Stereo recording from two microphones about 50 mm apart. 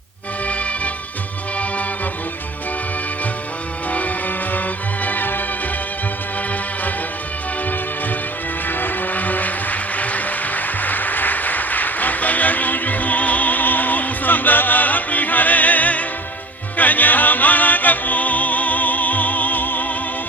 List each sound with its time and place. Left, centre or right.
5.0 s music: left
8.6 s vehicle: left
16.7 s music: left